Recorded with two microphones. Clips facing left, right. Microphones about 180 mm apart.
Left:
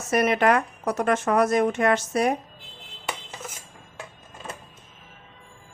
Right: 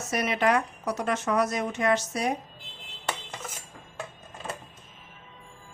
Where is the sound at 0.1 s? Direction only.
55° left (ahead or behind).